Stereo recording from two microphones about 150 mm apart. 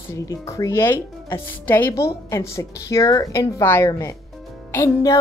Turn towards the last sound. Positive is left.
turn(degrees=20)  # may be behind; listen again after turning